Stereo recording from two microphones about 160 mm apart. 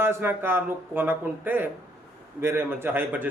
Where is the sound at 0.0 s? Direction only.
15° right (ahead or behind).